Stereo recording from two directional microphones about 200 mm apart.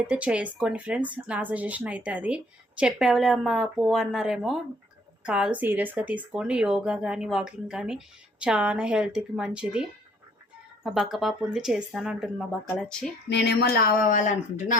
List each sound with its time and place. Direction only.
0.1 s speech: 5° right (ahead or behind)
10.8 s speech: centre (ahead or behind)
13.2 s speech: 55° left (ahead or behind); by 14.8 s 35° left (ahead or behind)